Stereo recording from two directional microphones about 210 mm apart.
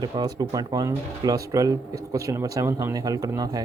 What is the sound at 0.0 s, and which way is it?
Speech, 20° right (ahead or behind).